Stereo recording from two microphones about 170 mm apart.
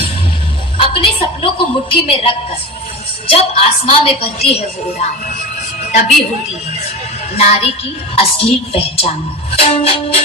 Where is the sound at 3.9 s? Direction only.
35° left (ahead or behind).